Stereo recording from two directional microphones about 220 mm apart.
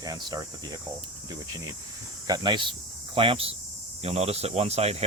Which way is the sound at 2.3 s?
20° right (ahead or behind).